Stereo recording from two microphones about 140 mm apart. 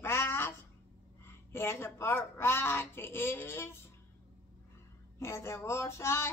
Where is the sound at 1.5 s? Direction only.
15° left (ahead or behind).